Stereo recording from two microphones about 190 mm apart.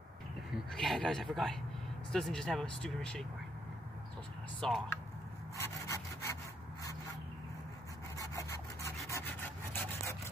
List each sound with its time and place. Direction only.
0.7 s speech: 5° left (ahead or behind)
4.6 s speech: centre (ahead or behind)
5.6 s wood: 15° left (ahead or behind)
8.2 s rub: 15° left (ahead or behind)